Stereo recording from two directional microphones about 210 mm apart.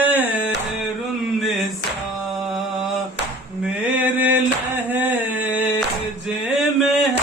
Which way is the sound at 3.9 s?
10° right (ahead or behind).